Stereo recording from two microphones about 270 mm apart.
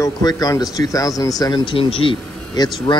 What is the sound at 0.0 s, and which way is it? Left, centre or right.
Speech, centre.